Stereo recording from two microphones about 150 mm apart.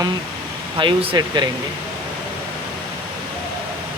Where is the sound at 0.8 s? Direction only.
35° right (ahead or behind).